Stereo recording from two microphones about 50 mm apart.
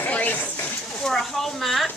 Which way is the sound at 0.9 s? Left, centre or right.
Centre.